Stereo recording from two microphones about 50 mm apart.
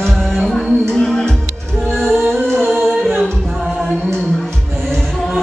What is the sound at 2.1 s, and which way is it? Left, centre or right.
Music, right.